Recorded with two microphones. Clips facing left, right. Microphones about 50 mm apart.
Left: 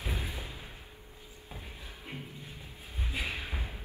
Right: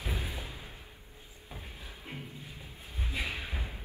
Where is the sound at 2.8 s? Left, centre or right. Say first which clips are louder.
Even; left.